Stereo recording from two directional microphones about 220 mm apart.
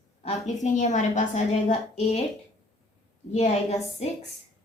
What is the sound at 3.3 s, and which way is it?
Speech, 30° left (ahead or behind).